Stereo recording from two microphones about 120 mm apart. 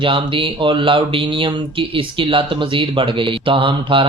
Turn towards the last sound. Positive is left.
turn(degrees=-45)  # may be behind; listen again after turning